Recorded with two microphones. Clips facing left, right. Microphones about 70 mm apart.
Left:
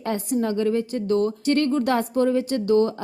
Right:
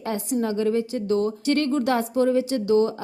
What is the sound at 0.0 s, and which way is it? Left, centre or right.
A woman's voice, left.